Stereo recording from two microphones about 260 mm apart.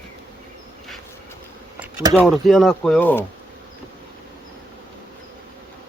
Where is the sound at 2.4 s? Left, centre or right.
Centre.